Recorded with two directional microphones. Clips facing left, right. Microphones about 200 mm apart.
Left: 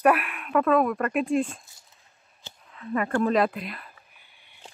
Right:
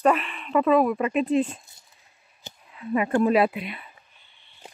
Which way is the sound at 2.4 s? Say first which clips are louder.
Right 3 dB; 15° right (ahead or behind).